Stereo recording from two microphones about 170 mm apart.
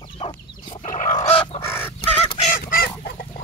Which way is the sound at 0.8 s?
50° left (ahead or behind).